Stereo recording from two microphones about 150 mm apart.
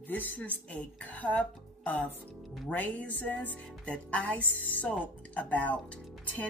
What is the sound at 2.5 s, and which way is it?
Speech, centre (ahead or behind).